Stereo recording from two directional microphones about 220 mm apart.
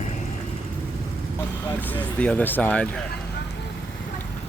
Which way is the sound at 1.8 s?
5° left (ahead or behind).